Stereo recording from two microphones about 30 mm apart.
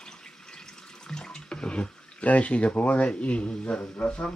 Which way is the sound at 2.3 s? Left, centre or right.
Left.